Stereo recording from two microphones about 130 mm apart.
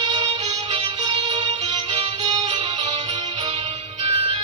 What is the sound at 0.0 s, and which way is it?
Music, 35° right (ahead or behind).